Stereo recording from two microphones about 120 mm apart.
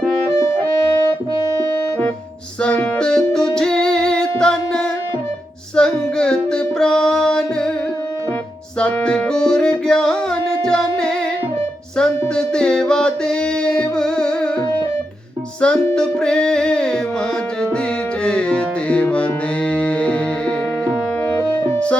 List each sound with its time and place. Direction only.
1.0 s music: 30° right (ahead or behind)
2.6 s music: 10° left (ahead or behind)
8.8 s music: 10° left (ahead or behind)
15.6 s music: 5° left (ahead or behind)
18.2 s music: 10° left (ahead or behind)
21.6 s music: 10° left (ahead or behind)